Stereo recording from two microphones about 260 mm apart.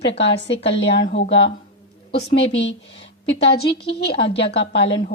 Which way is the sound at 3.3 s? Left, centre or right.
Left.